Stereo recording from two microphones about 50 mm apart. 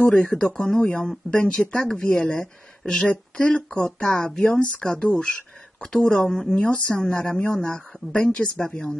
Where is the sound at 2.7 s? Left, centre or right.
Centre.